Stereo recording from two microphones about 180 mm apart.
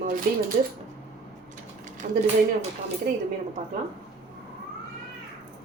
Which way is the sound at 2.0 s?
50° right (ahead or behind).